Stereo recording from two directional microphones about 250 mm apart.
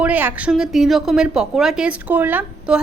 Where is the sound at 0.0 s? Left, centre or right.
Centre.